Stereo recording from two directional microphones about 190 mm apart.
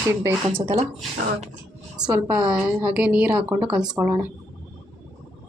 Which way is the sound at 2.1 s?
5° right (ahead or behind).